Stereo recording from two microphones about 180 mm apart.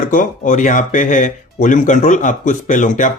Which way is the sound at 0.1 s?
45° left (ahead or behind).